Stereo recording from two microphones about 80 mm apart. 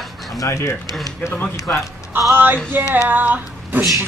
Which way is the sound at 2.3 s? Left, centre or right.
Right.